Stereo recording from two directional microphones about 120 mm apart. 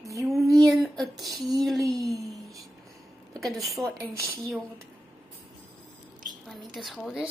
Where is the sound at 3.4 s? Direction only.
Centre (ahead or behind).